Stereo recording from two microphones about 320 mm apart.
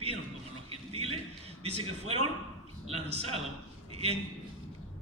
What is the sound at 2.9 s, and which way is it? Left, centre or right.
Speech, centre.